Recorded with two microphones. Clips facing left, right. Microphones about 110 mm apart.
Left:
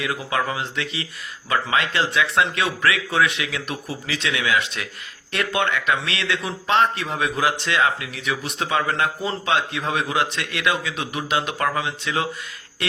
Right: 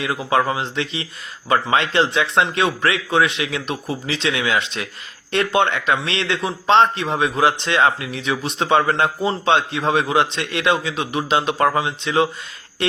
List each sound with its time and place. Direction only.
0.0 s a man's voice: 30° right (ahead or behind)